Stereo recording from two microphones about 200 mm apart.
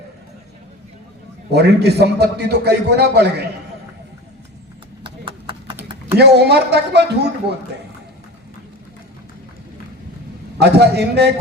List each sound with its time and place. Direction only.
1.5 s a man's voice: 55° right (ahead or behind)
5.0 s clip-clop: 25° right (ahead or behind)
6.1 s a man's voice: 55° right (ahead or behind)
10.6 s a man's voice: 55° right (ahead or behind)